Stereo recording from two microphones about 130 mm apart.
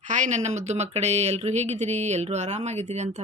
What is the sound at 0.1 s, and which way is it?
Speech, 70° right (ahead or behind).